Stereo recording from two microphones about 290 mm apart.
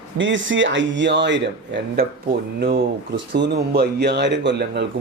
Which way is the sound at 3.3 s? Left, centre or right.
Right.